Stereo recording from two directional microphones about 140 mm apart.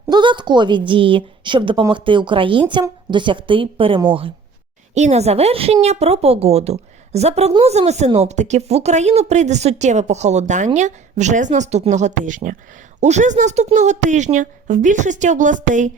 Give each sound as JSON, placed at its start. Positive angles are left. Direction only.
{"t": 0.1, "sound": "a woman's voice", "side_deg": -35}
{"t": 4.9, "sound": "a woman's voice", "side_deg": -55}